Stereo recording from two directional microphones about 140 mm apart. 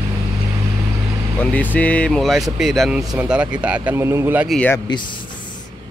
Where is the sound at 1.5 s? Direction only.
10° left (ahead or behind); by 4.5 s 15° right (ahead or behind).